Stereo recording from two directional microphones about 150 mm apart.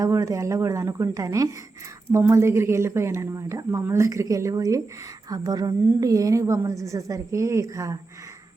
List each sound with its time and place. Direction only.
0.0 s a woman's voice: 20° right (ahead or behind)